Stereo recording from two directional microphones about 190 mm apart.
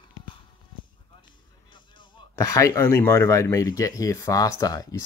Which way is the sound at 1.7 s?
20° left (ahead or behind).